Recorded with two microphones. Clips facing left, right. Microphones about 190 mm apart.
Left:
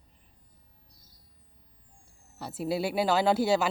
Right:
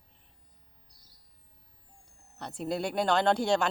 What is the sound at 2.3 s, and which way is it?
A woman's voice, 5° left (ahead or behind).